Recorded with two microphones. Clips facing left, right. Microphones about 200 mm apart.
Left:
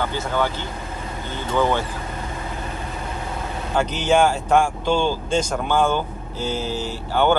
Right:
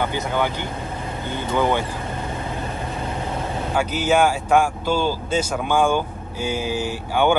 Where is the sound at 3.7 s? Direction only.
5° right (ahead or behind).